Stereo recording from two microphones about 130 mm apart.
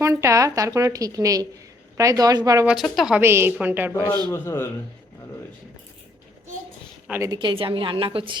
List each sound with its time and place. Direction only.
0.0 s a woman's voice: 25° right (ahead or behind)
2.6 s speech: centre (ahead or behind)
3.2 s a woman's voice: 20° right (ahead or behind)
4.3 s a man's voice: 20° left (ahead or behind)
7.3 s a woman's voice: 40° right (ahead or behind)